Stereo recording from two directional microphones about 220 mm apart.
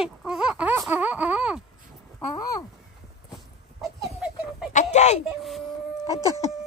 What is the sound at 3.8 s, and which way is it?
Chicken, centre (ahead or behind).